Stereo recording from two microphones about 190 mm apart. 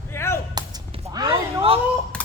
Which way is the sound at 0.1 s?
15° left (ahead or behind).